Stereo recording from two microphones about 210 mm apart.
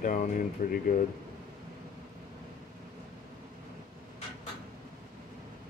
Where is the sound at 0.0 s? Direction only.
40° left (ahead or behind).